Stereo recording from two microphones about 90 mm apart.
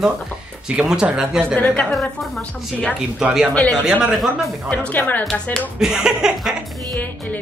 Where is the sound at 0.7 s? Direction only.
10° right (ahead or behind).